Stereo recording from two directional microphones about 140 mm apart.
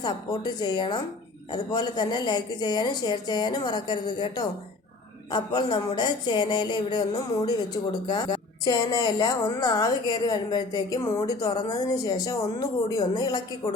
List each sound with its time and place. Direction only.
0.0 s a woman's voice: 30° left (ahead or behind)